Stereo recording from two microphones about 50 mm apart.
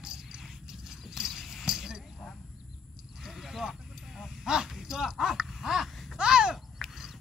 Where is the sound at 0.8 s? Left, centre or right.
Centre.